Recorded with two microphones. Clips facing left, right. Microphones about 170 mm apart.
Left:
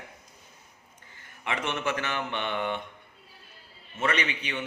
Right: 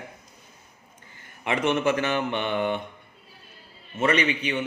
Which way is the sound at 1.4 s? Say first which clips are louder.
Right 7 dB; 15° right (ahead or behind).